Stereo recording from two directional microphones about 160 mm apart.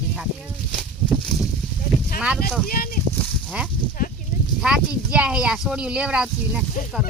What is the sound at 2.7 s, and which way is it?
Speech, 65° left (ahead or behind).